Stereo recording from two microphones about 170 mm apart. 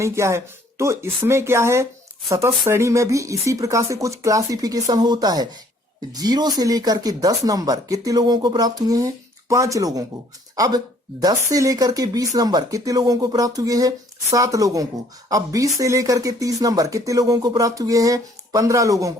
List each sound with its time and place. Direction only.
0.0 s speech: 15° right (ahead or behind)